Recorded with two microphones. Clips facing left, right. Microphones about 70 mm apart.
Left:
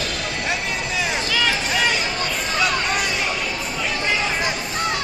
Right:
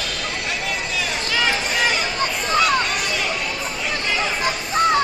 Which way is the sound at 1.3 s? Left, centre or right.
Centre.